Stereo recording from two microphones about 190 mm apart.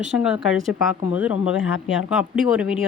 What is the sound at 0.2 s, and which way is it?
A woman's voice, 5° right (ahead or behind).